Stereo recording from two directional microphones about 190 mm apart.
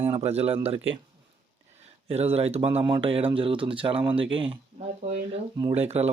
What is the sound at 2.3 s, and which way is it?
Speech, 30° right (ahead or behind).